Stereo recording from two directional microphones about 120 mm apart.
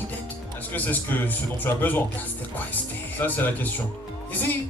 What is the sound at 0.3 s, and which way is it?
Speech, 15° left (ahead or behind).